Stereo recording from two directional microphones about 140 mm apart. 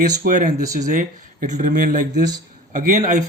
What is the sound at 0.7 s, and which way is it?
Speech, 65° right (ahead or behind).